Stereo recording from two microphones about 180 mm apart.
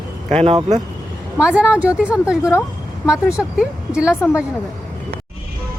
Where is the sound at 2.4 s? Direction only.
15° left (ahead or behind).